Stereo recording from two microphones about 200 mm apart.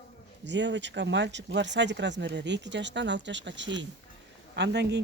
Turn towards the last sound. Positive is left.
turn(degrees=-60)  # may be behind; listen again after turning